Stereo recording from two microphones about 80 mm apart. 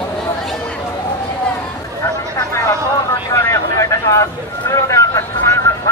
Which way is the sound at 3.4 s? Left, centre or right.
Left.